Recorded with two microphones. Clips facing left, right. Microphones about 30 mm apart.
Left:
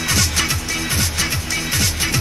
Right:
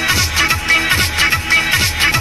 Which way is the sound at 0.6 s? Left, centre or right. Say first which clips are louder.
Right 9 dB; right.